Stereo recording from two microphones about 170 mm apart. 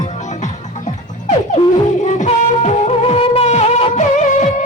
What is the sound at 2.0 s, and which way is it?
Music, 45° left (ahead or behind).